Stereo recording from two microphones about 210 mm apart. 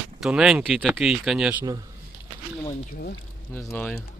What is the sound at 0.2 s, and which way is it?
Speech, 5° right (ahead or behind).